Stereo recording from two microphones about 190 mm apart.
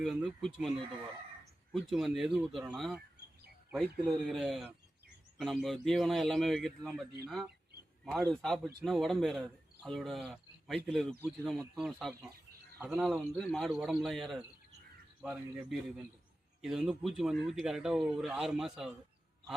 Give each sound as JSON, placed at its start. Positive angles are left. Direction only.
{"t": 0.0, "sound": "speech", "side_deg": 0}
{"t": 1.7, "sound": "speech", "side_deg": 0}
{"t": 12.8, "sound": "a man's voice", "side_deg": -10}